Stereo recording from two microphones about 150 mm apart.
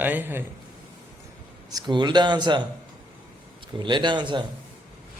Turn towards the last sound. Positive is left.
turn(degrees=-30)  # may be behind; listen again after turning